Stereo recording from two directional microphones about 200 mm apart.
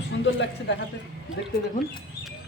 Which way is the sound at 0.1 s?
65° left (ahead or behind).